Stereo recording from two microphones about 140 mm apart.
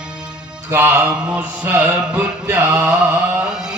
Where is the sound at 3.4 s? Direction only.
5° right (ahead or behind).